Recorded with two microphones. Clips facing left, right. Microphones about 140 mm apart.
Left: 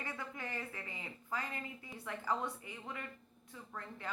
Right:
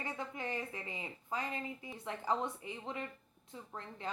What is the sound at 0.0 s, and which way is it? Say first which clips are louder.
Speech: right 3 dB; 20° right (ahead or behind).